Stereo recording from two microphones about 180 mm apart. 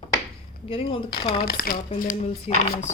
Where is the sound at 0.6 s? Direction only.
30° left (ahead or behind).